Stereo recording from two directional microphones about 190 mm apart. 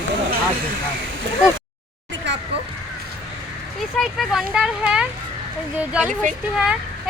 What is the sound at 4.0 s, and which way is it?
Speech, centre (ahead or behind).